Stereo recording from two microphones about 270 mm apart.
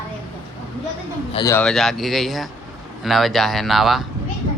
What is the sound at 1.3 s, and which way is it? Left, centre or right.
Speech, centre.